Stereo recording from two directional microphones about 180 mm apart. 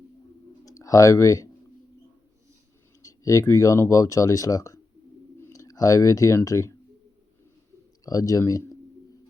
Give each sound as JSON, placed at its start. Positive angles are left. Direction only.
{"t": 0.6, "sound": "speech", "side_deg": 20}
{"t": 3.0, "sound": "speech", "side_deg": 20}
{"t": 8.0, "sound": "speech", "side_deg": 20}